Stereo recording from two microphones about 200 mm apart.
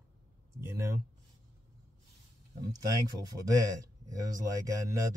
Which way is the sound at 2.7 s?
20° right (ahead or behind).